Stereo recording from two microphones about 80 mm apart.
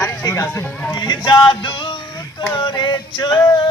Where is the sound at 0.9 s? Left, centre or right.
Left.